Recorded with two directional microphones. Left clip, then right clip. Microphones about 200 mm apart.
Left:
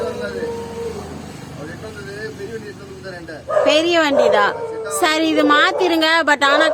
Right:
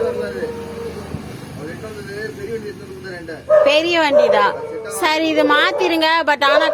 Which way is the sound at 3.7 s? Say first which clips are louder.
Even; 15° left (ahead or behind).